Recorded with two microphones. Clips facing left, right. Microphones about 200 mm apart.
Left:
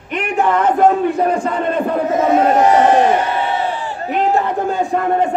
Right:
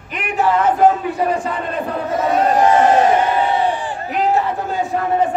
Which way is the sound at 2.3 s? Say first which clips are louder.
Left 1 dB; 25° left (ahead or behind).